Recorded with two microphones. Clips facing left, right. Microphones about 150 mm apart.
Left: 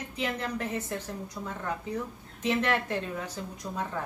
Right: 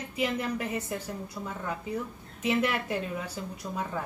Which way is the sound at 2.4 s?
10° right (ahead or behind).